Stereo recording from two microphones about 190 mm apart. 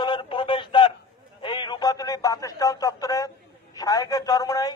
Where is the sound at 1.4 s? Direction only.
25° left (ahead or behind).